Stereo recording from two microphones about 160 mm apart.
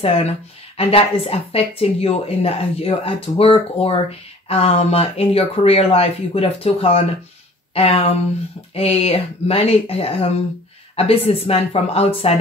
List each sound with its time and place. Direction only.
0.0 s speech: 35° left (ahead or behind)